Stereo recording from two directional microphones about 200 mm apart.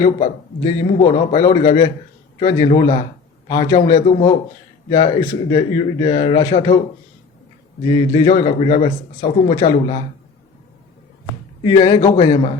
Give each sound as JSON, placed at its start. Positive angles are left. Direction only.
{"t": 0.0, "sound": "a man's voice", "side_deg": 25}
{"t": 2.5, "sound": "a man's voice", "side_deg": 20}
{"t": 3.5, "sound": "a man's voice", "side_deg": 35}
{"t": 7.9, "sound": "a man's voice", "side_deg": 25}
{"t": 8.3, "sound": "speech", "side_deg": 35}
{"t": 11.6, "sound": "a man's voice", "side_deg": 25}